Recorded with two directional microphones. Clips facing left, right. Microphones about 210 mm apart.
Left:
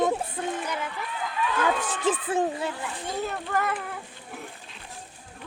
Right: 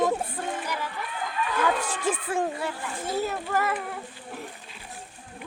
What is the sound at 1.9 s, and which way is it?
Speech, 20° left (ahead or behind).